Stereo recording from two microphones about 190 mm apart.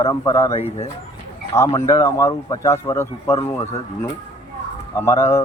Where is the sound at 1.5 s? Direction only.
15° left (ahead or behind).